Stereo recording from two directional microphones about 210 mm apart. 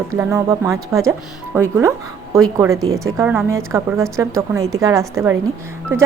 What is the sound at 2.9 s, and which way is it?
A woman's voice, 15° right (ahead or behind).